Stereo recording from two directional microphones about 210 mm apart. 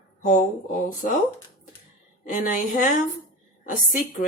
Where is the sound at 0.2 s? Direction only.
35° left (ahead or behind).